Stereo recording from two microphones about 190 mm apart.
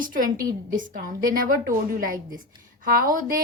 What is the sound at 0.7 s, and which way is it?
Speech, 45° right (ahead or behind).